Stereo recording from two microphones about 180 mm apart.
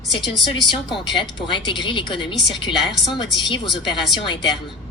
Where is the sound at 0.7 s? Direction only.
25° left (ahead or behind).